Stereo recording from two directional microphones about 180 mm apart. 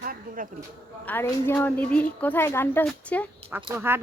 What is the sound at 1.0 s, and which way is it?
A woman's voice, 10° left (ahead or behind).